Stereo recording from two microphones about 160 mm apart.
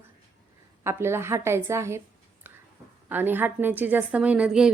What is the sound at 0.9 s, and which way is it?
A woman's voice, 15° right (ahead or behind).